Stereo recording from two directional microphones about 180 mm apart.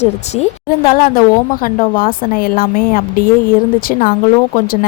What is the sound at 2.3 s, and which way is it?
A woman's voice, 55° left (ahead or behind).